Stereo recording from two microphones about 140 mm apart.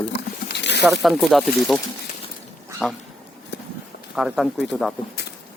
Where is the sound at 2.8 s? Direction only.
Centre (ahead or behind).